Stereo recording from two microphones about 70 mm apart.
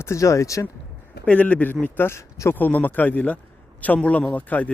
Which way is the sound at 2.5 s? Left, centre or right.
Left.